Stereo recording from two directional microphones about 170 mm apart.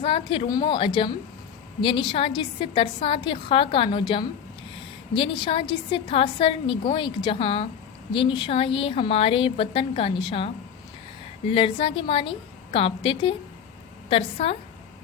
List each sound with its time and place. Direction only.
0.0 s a woman's voice: 30° left (ahead or behind)